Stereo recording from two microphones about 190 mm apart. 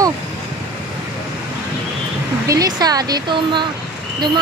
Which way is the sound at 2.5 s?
20° right (ahead or behind).